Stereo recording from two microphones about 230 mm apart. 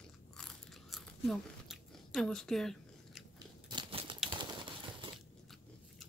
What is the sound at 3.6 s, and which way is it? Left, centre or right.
Crumpling, right.